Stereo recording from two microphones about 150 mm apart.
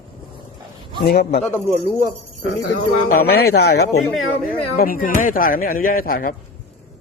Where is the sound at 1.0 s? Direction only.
90° left.